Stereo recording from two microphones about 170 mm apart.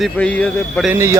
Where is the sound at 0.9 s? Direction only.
15° right (ahead or behind).